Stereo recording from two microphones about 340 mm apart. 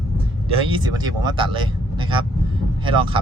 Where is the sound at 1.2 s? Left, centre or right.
Centre.